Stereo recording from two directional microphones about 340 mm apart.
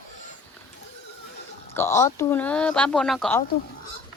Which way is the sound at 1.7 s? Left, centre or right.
Centre.